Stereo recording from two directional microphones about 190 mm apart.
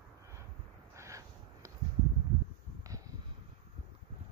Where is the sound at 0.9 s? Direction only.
15° right (ahead or behind).